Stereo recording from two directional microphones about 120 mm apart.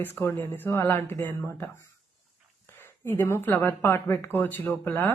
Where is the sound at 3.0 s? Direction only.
20° left (ahead or behind).